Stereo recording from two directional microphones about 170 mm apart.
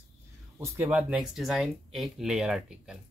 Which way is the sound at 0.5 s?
15° right (ahead or behind).